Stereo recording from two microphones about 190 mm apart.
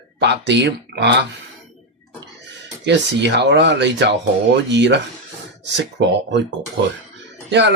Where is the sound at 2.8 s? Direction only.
65° right (ahead or behind).